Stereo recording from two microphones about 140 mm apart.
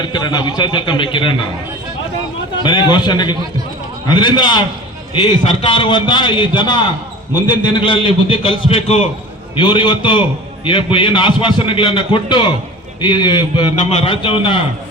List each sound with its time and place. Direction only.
0.0 s a man's voice: 30° left (ahead or behind)
2.6 s a man's voice: 35° left (ahead or behind)
9.6 s a man's voice: 35° left (ahead or behind)